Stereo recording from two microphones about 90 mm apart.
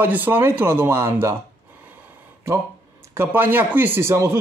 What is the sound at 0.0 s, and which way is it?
Speech, 20° right (ahead or behind).